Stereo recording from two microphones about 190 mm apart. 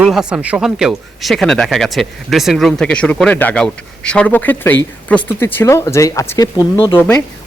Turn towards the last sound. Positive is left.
turn(degrees=10)  # may be behind; listen again after turning